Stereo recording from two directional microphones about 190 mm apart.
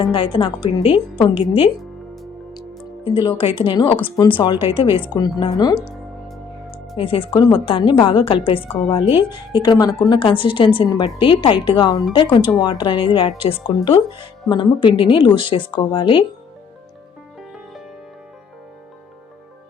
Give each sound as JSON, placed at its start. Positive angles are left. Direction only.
{"t": 0.0, "sound": "speech", "side_deg": 25}
{"t": 2.5, "sound": "music", "side_deg": 25}
{"t": 3.6, "sound": "speech", "side_deg": 30}
{"t": 6.2, "sound": "music", "side_deg": 0}
{"t": 6.9, "sound": "speech", "side_deg": 30}